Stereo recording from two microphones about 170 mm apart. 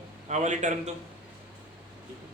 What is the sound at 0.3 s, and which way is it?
Speech, 45° right (ahead or behind).